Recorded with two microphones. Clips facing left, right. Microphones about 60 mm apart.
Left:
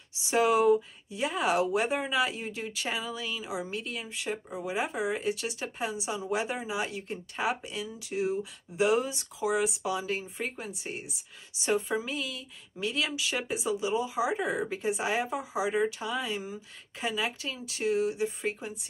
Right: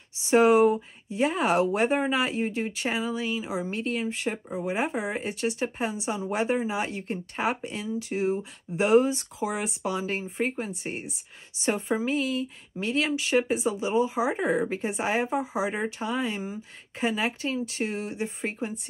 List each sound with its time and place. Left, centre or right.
0.3 s speech: right
3.7 s speech: right
4.5 s speech: right
17.6 s speech: right